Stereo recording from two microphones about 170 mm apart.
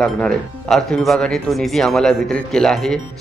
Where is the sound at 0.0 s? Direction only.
Centre (ahead or behind).